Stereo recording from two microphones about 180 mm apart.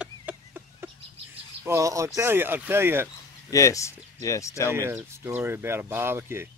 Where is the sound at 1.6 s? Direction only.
15° right (ahead or behind).